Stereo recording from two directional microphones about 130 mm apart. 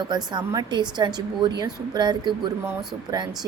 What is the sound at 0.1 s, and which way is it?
A woman's voice, 35° right (ahead or behind).